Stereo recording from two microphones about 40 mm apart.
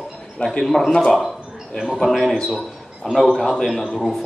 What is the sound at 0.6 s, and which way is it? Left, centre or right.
A man's voice, centre.